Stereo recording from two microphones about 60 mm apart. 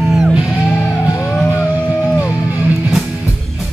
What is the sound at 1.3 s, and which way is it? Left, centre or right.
Music, left.